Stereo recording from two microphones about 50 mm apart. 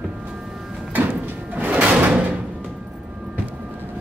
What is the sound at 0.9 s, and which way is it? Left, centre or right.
Door, right.